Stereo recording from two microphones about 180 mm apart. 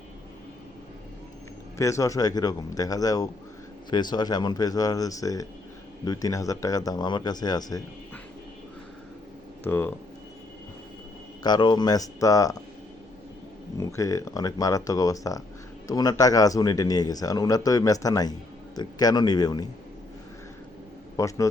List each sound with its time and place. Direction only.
1.8 s speech: 15° left (ahead or behind)
9.6 s speech: 10° left (ahead or behind)
11.4 s speech: 25° left (ahead or behind)
13.7 s speech: 20° left (ahead or behind)
21.2 s a man's voice: 20° left (ahead or behind)